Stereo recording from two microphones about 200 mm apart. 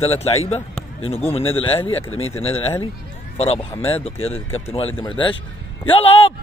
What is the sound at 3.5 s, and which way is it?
Speech, 10° left (ahead or behind).